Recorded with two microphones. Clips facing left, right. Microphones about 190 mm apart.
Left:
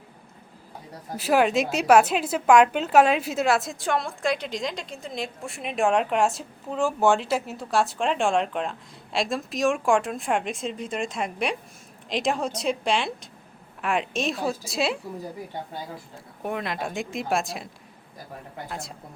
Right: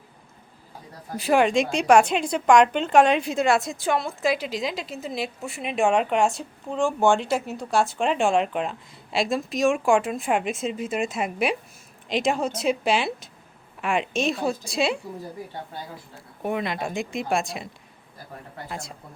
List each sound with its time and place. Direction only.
1.1 s a woman's voice: 5° left (ahead or behind)
16.0 s a woman's voice: centre (ahead or behind)
18.7 s a woman's voice: centre (ahead or behind)